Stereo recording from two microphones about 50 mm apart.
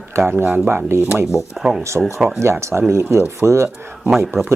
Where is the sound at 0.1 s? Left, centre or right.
Right.